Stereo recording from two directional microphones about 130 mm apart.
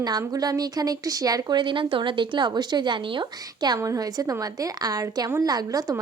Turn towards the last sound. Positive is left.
turn(degrees=-30)  # may be behind; listen again after turning